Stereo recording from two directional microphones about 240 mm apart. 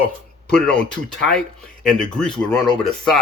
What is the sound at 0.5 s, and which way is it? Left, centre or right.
Speech, centre.